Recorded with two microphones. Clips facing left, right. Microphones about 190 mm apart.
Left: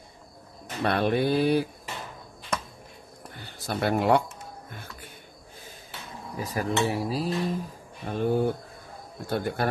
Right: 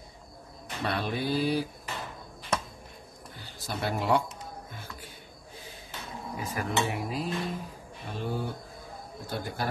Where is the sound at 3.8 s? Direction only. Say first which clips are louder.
Left 5 dB; 60° left (ahead or behind).